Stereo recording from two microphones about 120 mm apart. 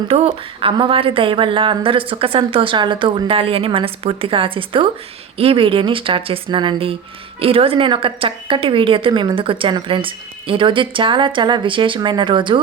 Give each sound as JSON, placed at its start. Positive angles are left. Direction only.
{"t": 0.1, "sound": "a woman's voice", "side_deg": -45}